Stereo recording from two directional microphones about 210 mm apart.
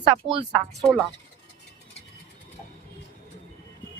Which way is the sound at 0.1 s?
25° right (ahead or behind).